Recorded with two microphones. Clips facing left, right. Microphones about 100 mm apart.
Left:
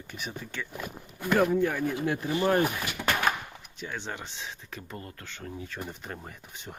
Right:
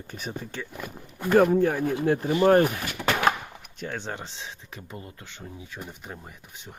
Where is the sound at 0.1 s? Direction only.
40° right (ahead or behind).